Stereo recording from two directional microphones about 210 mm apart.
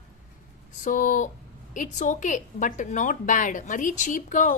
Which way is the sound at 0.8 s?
40° left (ahead or behind).